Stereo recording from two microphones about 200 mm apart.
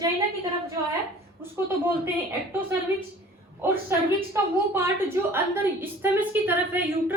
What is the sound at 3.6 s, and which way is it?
A woman's voice, 10° right (ahead or behind).